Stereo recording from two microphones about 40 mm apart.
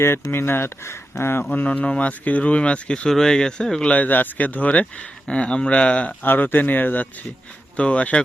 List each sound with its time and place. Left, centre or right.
0.0 s speech: left
1.4 s speech: left
1.6 s speech: left
3.1 s speech: centre
3.8 s speech: left
6.2 s speech: left
7.8 s speech: left